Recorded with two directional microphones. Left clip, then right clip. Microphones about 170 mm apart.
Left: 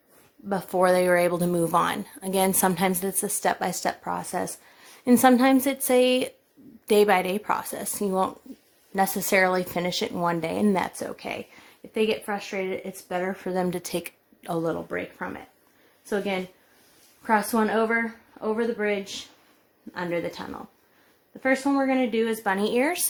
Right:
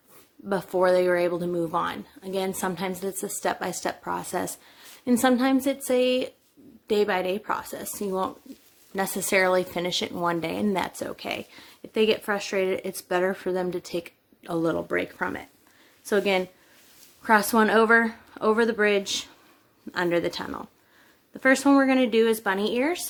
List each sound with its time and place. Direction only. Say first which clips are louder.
0.4 s a woman's voice: left 1 dB; 30° left (ahead or behind)